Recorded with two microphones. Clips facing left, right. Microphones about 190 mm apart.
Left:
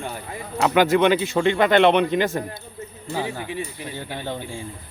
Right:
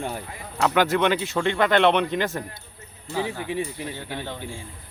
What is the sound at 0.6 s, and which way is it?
A man's voice, 5° left (ahead or behind).